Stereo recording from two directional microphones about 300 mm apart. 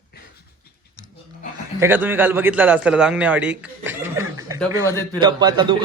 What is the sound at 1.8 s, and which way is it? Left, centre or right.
A man's voice, centre.